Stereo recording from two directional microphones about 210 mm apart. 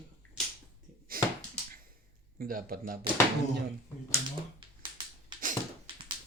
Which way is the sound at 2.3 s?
45° right (ahead or behind).